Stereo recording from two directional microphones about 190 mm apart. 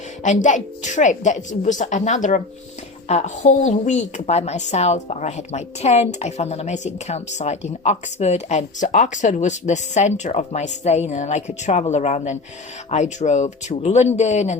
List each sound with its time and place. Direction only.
0.2 s a woman's voice: 40° left (ahead or behind)